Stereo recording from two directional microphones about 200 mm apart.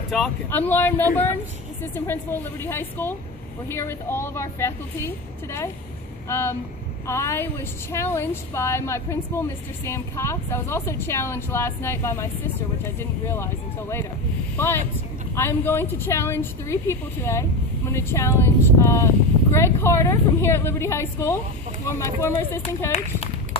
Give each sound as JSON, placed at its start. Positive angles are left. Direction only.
{"t": 0.1, "sound": "a woman's voice", "side_deg": 5}
{"t": 15.3, "sound": "a woman's voice", "side_deg": 10}
{"t": 22.8, "sound": "run", "side_deg": 30}